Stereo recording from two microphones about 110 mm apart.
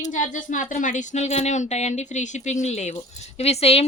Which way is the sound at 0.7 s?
90° left.